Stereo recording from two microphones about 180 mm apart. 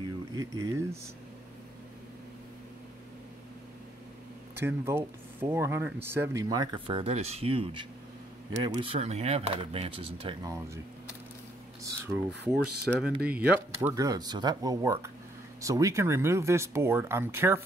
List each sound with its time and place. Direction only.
0.0 s a sound: 20° right (ahead or behind)
4.6 s speech: 15° right (ahead or behind); by 10.5 s 30° right (ahead or behind)
12.4 s speech: 5° right (ahead or behind)